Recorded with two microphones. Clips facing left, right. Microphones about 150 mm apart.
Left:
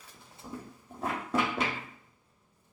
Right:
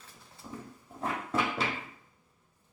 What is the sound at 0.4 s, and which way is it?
Roaring cats, 15° left (ahead or behind).